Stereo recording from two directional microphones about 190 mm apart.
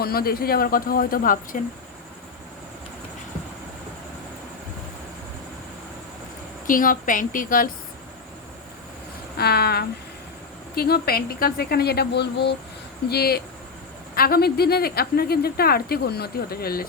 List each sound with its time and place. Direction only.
0.0 s speech: 55° left (ahead or behind)
6.7 s speech: 45° left (ahead or behind)
9.4 s speech: 55° left (ahead or behind)